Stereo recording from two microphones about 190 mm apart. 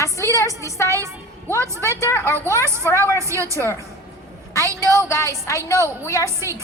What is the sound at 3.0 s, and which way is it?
A woman's voice, 15° right (ahead or behind).